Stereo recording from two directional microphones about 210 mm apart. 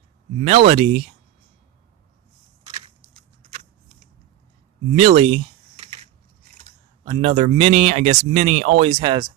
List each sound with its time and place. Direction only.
0.4 s speech: 30° right (ahead or behind)
4.9 s typing: 30° right (ahead or behind)
7.1 s speech: 30° right (ahead or behind)